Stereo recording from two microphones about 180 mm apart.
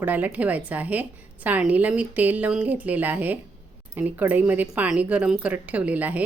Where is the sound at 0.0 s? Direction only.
10° right (ahead or behind).